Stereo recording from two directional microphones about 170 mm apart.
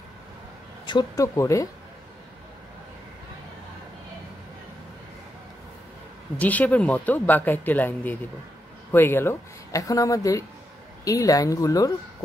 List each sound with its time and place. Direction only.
0.8 s speech: 20° left (ahead or behind)
6.3 s speech: 10° left (ahead or behind)